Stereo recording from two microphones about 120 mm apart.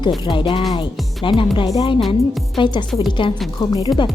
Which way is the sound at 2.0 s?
Centre (ahead or behind).